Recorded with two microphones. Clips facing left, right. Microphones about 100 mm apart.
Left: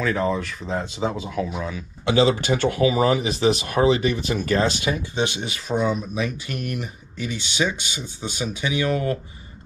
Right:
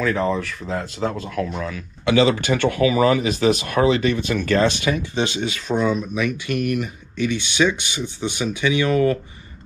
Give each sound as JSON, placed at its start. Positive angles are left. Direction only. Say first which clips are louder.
{"t": 0.0, "sound": "speech", "louder": "right 2 dB", "side_deg": 0}
{"t": 2.0, "sound": "speech", "louder": "right 2 dB", "side_deg": 20}
{"t": 6.1, "sound": "speech", "louder": "right 5 dB", "side_deg": 30}
{"t": 7.2, "sound": "speech", "louder": "right 5 dB", "side_deg": -65}
{"t": 8.9, "sound": "speech", "louder": "right 6 dB", "side_deg": 20}